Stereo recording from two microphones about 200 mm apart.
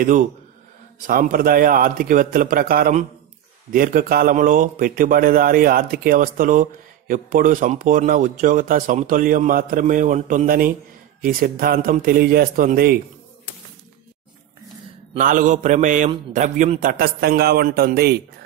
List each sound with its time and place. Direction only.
0.0 s mantra: 40° right (ahead or behind)
1.0 s speech: 45° right (ahead or behind)
15.1 s mantra: 40° right (ahead or behind)
16.3 s speech: 40° right (ahead or behind)